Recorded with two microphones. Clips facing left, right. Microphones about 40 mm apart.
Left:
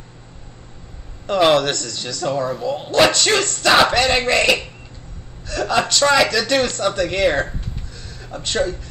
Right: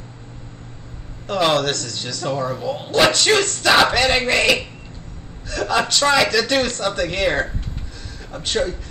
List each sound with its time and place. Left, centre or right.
1.2 s speech: centre